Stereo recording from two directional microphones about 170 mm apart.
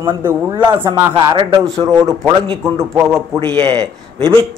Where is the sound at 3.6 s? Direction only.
30° right (ahead or behind).